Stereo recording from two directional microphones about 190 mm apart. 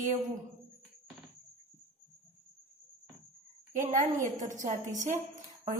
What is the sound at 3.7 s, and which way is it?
A woman's voice, 40° right (ahead or behind).